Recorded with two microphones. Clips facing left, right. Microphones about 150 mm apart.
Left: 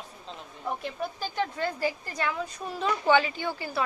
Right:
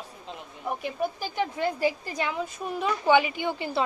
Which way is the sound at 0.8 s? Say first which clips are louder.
Right 3 dB; 10° right (ahead or behind).